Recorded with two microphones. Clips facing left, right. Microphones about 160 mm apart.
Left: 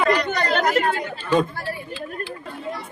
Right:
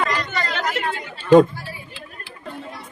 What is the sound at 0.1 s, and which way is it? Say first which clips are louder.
Chatter: left 5 dB; 45° left (ahead or behind).